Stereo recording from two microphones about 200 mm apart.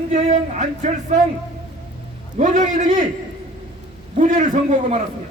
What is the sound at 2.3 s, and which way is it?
Speech, 40° right (ahead or behind).